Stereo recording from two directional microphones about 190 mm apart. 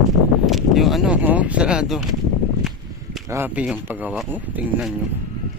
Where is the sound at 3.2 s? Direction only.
10° right (ahead or behind).